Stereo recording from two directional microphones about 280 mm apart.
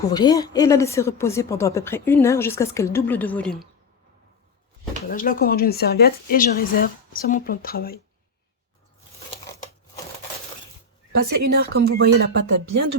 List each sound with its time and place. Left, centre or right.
0.1 s speech: centre
5.0 s a woman's voice: left
11.4 s speech: right
12.5 s speech: right